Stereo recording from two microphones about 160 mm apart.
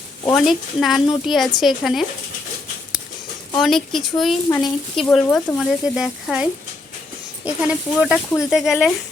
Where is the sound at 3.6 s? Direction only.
Centre (ahead or behind).